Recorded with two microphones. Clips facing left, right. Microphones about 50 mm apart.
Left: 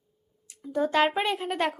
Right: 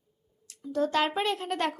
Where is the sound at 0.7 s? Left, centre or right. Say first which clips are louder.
Left 3 dB; centre.